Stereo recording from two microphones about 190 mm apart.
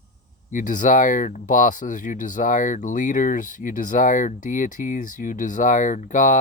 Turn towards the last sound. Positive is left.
turn(degrees=40)  # may be behind; listen again after turning